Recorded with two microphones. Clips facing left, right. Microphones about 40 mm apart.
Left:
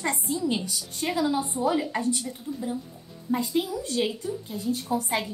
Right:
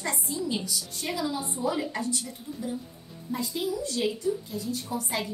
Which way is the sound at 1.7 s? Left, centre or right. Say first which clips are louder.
Left 3 dB; centre.